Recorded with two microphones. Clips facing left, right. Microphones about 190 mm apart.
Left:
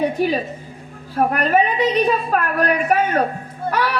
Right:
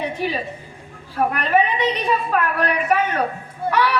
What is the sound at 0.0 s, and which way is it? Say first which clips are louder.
A woman's voice: left 5 dB; 40° left (ahead or behind).